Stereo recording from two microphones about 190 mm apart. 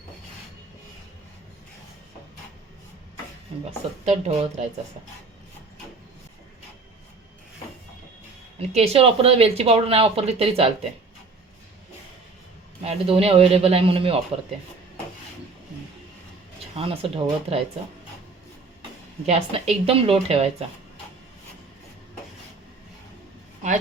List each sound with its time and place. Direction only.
3.7 s speech: 35° right (ahead or behind)
8.5 s speech: 35° right (ahead or behind)
12.8 s speech: 30° right (ahead or behind)
16.7 s speech: 30° right (ahead or behind)
18.8 s speech: 30° right (ahead or behind)